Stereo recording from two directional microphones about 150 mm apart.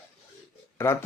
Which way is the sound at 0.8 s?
15° left (ahead or behind).